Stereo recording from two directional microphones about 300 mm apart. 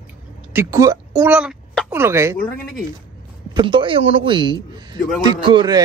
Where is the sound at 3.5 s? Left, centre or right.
Centre.